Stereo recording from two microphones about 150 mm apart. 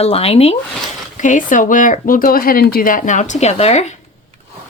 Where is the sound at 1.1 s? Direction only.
55° left (ahead or behind).